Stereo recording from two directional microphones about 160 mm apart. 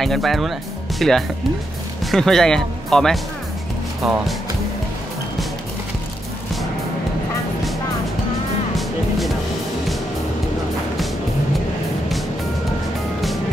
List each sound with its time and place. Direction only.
0.0 s speech: centre (ahead or behind)